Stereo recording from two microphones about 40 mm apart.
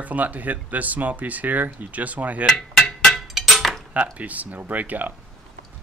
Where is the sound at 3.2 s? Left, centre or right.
Centre.